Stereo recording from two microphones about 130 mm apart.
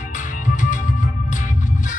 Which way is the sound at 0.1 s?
75° left (ahead or behind).